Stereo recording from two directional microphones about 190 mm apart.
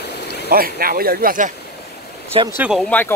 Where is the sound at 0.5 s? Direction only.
50° right (ahead or behind).